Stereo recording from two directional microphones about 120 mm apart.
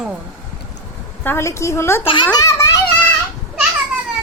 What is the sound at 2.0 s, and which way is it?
Speech, 40° left (ahead or behind).